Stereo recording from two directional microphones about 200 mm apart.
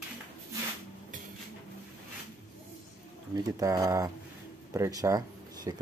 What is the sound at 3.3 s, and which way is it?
Speech, 15° right (ahead or behind).